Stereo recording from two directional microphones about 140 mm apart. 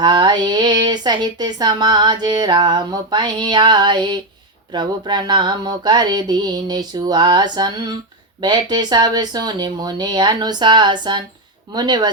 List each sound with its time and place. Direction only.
0.0 s speech: 35° right (ahead or behind)